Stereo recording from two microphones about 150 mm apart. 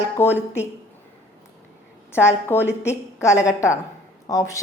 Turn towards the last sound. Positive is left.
turn(degrees=25)  # may be behind; listen again after turning